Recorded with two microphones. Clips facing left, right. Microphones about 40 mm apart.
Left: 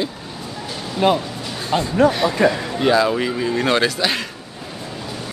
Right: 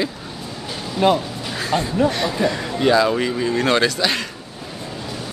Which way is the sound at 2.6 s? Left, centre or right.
Centre.